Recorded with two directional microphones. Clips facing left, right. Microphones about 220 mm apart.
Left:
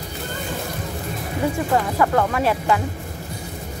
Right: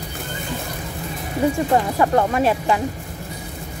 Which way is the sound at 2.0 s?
25° right (ahead or behind).